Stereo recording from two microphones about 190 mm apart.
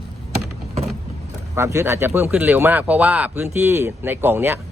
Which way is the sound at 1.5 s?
15° right (ahead or behind).